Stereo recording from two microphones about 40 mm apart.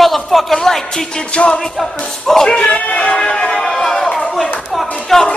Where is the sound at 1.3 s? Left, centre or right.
Left.